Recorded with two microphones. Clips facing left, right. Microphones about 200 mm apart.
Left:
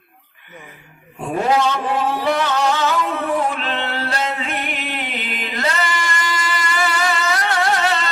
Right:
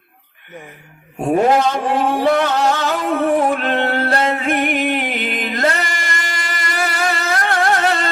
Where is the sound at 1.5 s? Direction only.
50° right (ahead or behind).